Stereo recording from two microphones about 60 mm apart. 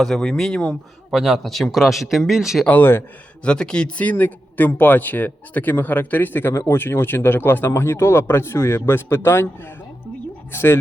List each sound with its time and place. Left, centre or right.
0.0 s speech: centre
1.1 s speech: centre
3.4 s speech: centre
4.0 s speech: left
6.5 s speech: left